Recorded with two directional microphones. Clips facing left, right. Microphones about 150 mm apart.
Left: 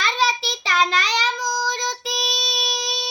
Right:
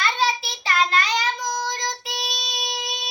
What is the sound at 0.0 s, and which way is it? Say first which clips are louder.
Child singing: left 1 dB; 90° left.